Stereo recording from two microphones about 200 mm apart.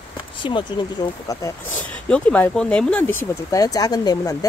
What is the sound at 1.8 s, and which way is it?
Speech, 5° left (ahead or behind).